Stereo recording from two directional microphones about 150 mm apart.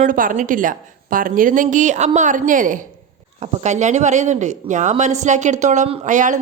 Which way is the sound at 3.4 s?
45° right (ahead or behind).